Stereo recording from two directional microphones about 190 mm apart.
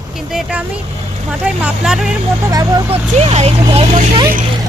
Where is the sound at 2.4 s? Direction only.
20° right (ahead or behind).